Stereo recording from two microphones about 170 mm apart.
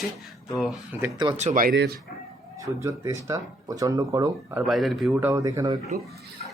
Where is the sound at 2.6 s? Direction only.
20° right (ahead or behind).